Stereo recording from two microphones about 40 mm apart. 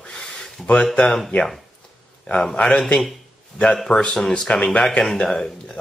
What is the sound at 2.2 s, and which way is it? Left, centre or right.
Speech, left.